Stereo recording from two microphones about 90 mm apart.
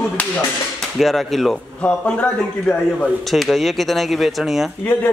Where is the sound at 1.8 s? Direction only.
15° left (ahead or behind).